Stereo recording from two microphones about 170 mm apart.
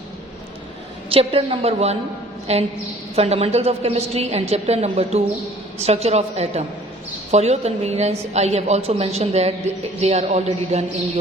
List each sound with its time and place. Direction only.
1.1 s a woman's voice: 35° right (ahead or behind)